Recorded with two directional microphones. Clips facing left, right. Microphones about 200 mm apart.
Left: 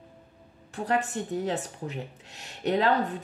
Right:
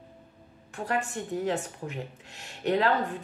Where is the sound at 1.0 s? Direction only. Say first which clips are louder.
Even; 35° left (ahead or behind).